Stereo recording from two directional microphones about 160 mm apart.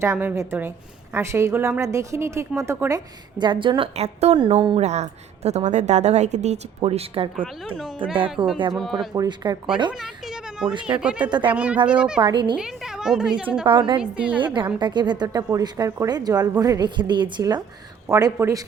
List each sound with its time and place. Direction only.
0.0 s a woman's voice: 15° right (ahead or behind)
3.3 s a woman's voice: 30° right (ahead or behind)
4.4 s a woman's voice: 30° right (ahead or behind)
8.7 s a woman's voice: centre (ahead or behind)
9.1 s speech: 25° right (ahead or behind)
10.8 s a woman's voice: 5° right (ahead or behind)
11.3 s speech: 30° right (ahead or behind)
11.5 s a woman's voice: 10° right (ahead or behind)
12.2 s speech: 30° right (ahead or behind)
12.5 s a woman's voice: 5° right (ahead or behind)
13.7 s a woman's voice: 30° right (ahead or behind)
14.0 s a woman's voice: 10° right (ahead or behind)
14.3 s speech: 30° right (ahead or behind)